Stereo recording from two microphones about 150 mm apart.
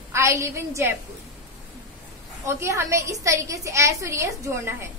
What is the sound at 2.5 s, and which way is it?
A woman's voice, 20° right (ahead or behind).